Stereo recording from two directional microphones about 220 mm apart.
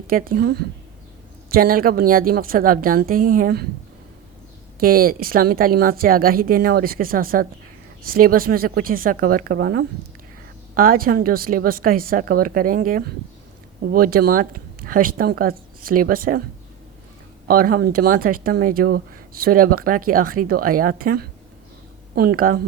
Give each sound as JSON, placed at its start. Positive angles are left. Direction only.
{"t": 0.1, "sound": "speech", "side_deg": -40}
{"t": 4.8, "sound": "speech", "side_deg": -40}
{"t": 17.5, "sound": "speech", "side_deg": -40}